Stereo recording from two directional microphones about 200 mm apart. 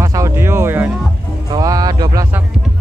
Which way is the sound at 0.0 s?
15° right (ahead or behind).